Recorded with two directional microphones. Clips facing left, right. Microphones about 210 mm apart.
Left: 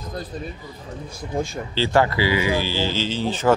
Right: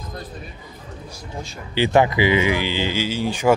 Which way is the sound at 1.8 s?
20° right (ahead or behind).